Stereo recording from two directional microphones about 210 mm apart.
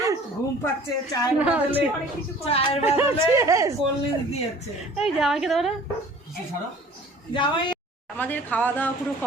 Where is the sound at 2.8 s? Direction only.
10° right (ahead or behind).